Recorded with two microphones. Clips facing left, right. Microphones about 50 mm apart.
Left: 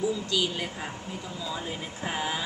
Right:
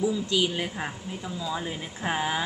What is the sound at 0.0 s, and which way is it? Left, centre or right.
Speech, right.